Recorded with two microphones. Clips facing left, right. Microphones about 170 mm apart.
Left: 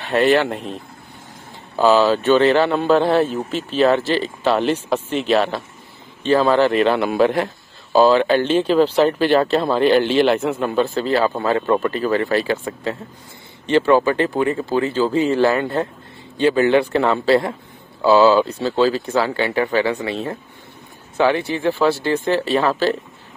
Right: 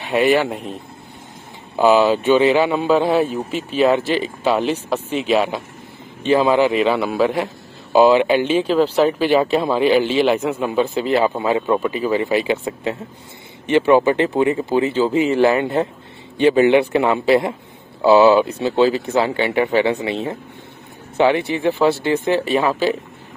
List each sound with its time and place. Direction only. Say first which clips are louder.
0.0 s speech: even; 10° right (ahead or behind)
1.8 s a man's voice: right 1 dB; 15° right (ahead or behind)
7.9 s speech: right 1 dB; 15° right (ahead or behind)
10.8 s speech: right 1 dB; 15° right (ahead or behind)
13.7 s speech: right 1 dB; 20° right (ahead or behind)